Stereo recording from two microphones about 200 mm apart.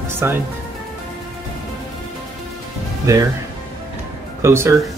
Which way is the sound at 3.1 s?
15° right (ahead or behind).